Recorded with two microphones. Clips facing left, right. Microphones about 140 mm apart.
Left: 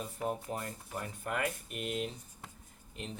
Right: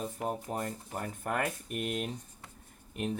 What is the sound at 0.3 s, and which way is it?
Speech, 40° right (ahead or behind).